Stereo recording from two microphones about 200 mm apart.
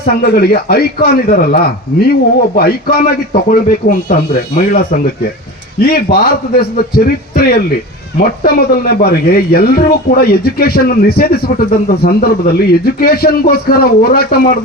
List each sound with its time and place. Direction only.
0.0 s speech: 50° left (ahead or behind)